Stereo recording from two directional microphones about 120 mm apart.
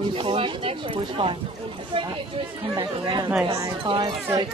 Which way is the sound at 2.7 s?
35° right (ahead or behind).